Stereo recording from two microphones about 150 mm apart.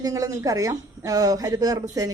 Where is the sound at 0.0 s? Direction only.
25° right (ahead or behind).